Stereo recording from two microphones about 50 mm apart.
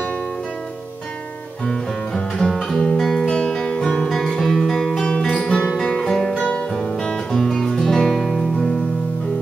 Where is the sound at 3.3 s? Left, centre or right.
Centre.